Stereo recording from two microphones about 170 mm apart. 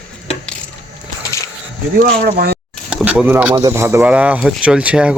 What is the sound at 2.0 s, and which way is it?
Speech, 60° right (ahead or behind).